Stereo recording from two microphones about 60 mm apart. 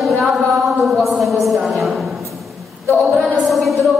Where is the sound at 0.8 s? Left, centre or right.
Centre.